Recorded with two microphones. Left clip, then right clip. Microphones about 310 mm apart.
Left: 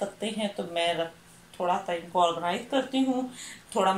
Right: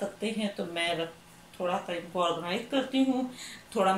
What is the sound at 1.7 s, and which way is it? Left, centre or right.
Speech, centre.